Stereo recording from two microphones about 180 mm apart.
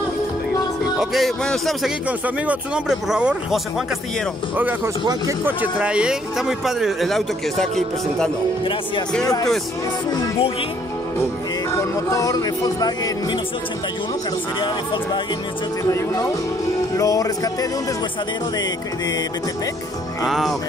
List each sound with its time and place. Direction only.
1.1 s speech: centre (ahead or behind)
9.2 s music: 20° left (ahead or behind)
11.7 s music: 20° left (ahead or behind)
15.9 s speech: 15° left (ahead or behind)
16.9 s music: 20° left (ahead or behind)
20.2 s speech: centre (ahead or behind)